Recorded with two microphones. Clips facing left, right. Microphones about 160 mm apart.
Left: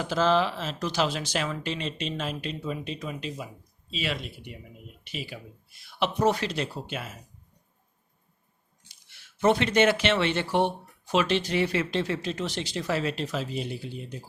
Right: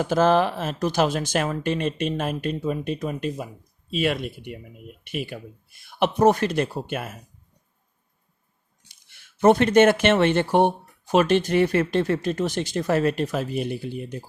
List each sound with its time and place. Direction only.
0.0 s speech: 50° right (ahead or behind)
8.9 s speech: 55° right (ahead or behind)